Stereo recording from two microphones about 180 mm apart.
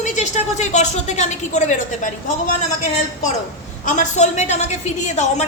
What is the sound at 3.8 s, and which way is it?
A woman's voice, 40° left (ahead or behind).